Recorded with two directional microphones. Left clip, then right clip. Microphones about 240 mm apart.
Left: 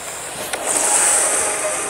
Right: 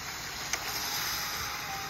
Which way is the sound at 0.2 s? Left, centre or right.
Left.